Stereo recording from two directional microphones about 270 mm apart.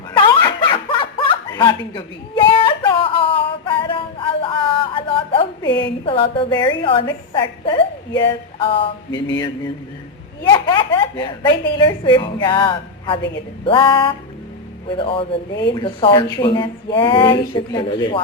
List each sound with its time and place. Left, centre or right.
0.2 s snicker: centre
6.1 s a woman's voice: centre
10.4 s a woman's voice: centre